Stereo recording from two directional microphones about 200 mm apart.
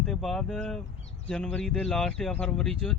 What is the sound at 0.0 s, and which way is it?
Speech, centre (ahead or behind).